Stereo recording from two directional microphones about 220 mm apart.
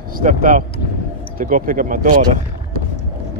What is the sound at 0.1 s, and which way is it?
Speech, 40° right (ahead or behind).